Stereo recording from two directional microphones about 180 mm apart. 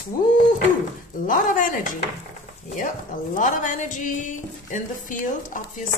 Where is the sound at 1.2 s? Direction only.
50° left (ahead or behind).